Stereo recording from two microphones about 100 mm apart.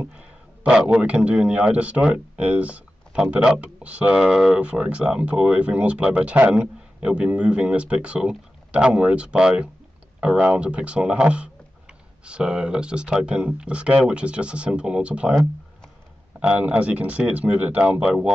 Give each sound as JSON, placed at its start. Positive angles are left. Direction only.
{"t": 0.0, "sound": "a man's voice", "side_deg": -10}
{"t": 16.3, "sound": "a man's voice", "side_deg": -10}